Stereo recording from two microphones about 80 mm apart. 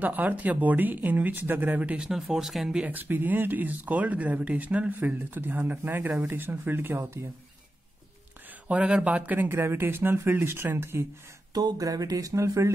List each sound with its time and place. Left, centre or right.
0.0 s speech: right
2.0 s speech: centre
2.8 s speech: right
8.6 s speech: centre; by 11.1 s right
11.5 s speech: right